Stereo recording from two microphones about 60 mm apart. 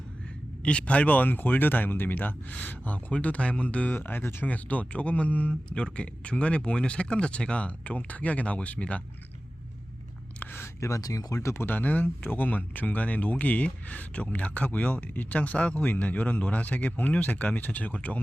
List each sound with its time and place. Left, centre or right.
0.6 s speech: left
3.9 s speech: left
4.4 s speech: left
10.8 s speech: left
11.3 s speech: left
11.6 s speech: left